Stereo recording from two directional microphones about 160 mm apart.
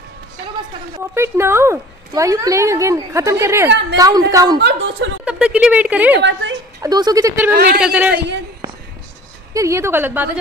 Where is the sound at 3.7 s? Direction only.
90° right.